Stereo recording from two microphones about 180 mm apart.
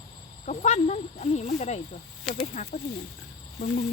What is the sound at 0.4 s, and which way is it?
Speech, 40° left (ahead or behind).